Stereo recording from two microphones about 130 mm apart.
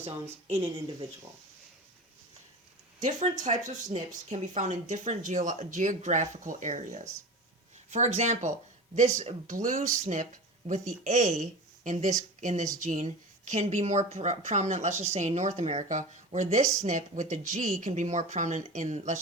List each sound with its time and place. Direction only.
3.0 s a woman's voice: 70° right (ahead or behind)